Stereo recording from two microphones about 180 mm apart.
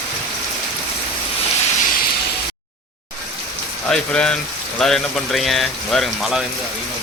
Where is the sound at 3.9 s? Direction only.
5° left (ahead or behind).